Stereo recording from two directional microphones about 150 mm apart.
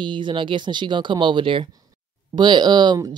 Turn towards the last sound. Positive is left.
turn(degrees=-25)  # may be behind; listen again after turning